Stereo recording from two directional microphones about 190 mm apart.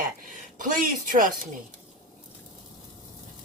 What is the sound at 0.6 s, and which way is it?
Speech, 45° right (ahead or behind).